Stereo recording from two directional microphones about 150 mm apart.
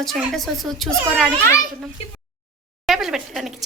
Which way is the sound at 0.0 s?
Centre (ahead or behind).